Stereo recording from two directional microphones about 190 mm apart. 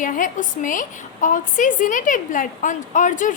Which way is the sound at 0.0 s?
45° left (ahead or behind).